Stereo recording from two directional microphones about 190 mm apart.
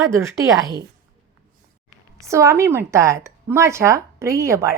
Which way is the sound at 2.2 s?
15° right (ahead or behind).